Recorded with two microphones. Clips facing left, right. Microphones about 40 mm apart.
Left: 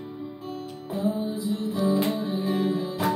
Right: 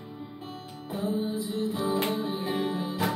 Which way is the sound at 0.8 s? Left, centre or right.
Right.